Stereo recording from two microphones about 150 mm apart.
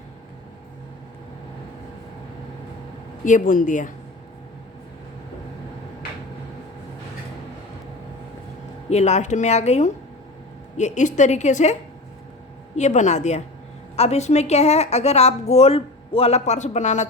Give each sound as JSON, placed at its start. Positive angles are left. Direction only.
{"t": 3.2, "sound": "speech", "side_deg": 60}
{"t": 8.9, "sound": "a woman's voice", "side_deg": 50}